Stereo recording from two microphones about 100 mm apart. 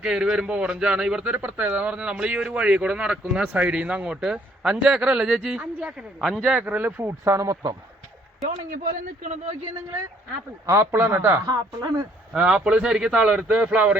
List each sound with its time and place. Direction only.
0.0 s a man's voice: 5° right (ahead or behind)
6.1 s speech: 5° left (ahead or behind)
6.4 s a man's voice: 10° right (ahead or behind)
7.3 s speech: 35° right (ahead or behind)
10.7 s speech: 25° right (ahead or behind)
11.4 s speech: 40° right (ahead or behind)
12.3 s a man's voice: 10° right (ahead or behind)